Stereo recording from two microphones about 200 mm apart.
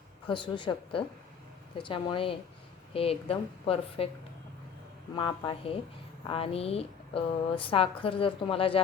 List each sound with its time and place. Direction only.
0.3 s a woman's voice: 25° left (ahead or behind)
5.1 s a woman's voice: 25° left (ahead or behind)